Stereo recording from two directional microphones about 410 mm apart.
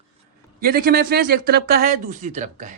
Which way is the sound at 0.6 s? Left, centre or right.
Right.